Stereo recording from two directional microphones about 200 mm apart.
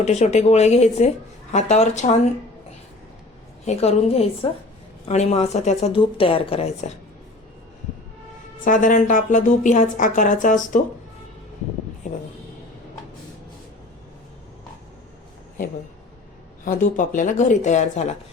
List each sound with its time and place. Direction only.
0.0 s a woman's voice: 35° left (ahead or behind)
3.7 s a woman's voice: 30° left (ahead or behind)
8.6 s a woman's voice: 40° left (ahead or behind)
12.0 s speech: 35° left (ahead or behind)
16.6 s a woman's voice: 40° left (ahead or behind)